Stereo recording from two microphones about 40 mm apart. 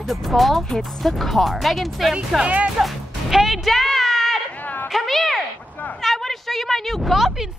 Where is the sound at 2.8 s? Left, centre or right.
Centre.